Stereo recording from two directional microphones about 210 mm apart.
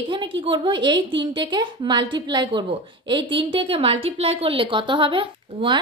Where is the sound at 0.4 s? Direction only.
25° right (ahead or behind).